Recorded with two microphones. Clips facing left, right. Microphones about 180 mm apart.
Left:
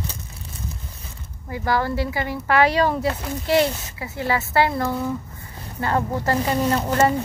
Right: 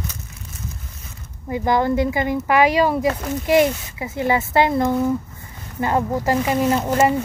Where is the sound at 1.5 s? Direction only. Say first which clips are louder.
Right 4 dB; 20° right (ahead or behind).